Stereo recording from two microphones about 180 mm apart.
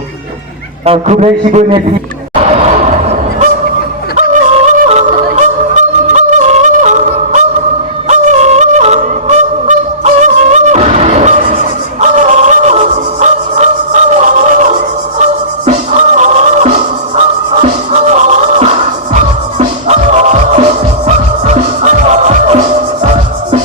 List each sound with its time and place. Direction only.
0.9 s a man's voice: 35° right (ahead or behind)
2.4 s a sound: 40° right (ahead or behind)
4.2 s yodeling: 40° right (ahead or behind)
8.0 s honk: 40° right (ahead or behind)
15.2 s music: 40° right (ahead or behind)